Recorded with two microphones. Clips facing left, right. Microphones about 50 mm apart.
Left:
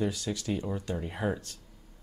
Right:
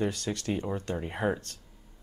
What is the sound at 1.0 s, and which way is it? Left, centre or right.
Speech, centre.